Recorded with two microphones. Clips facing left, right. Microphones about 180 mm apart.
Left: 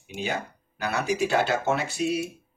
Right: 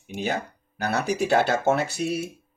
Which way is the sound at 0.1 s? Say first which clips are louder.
Right 3 dB; 40° right (ahead or behind).